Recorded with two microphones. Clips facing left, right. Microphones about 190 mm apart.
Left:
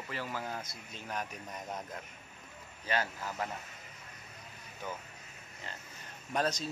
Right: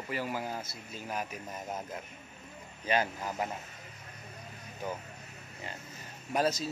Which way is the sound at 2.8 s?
15° right (ahead or behind).